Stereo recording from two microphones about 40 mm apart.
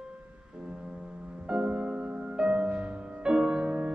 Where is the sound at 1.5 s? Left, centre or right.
Right.